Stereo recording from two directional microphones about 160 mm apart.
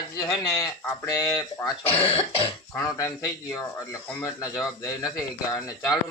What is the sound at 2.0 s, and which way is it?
Cough, 35° left (ahead or behind).